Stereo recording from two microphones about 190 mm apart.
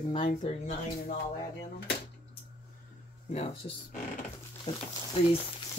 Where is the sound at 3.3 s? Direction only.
35° left (ahead or behind).